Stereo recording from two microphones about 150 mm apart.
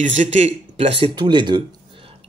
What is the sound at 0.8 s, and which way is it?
Speech, 40° right (ahead or behind).